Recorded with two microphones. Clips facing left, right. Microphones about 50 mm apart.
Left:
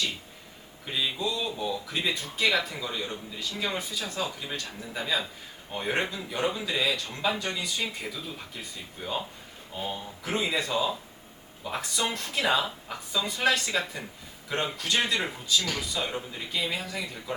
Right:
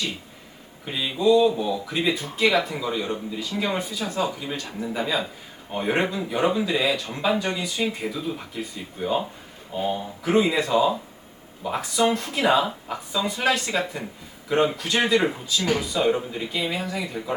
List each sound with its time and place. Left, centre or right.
0.9 s speech: centre